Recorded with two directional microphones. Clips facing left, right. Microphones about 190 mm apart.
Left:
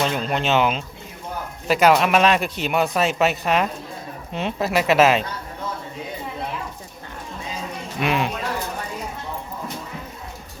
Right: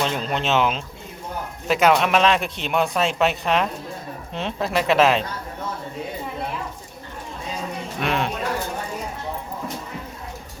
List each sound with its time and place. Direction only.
0.0 s speech: 5° left (ahead or behind)
7.9 s speech: 5° left (ahead or behind)